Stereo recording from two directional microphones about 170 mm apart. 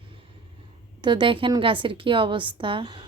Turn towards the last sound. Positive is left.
turn(degrees=-25)  # may be behind; listen again after turning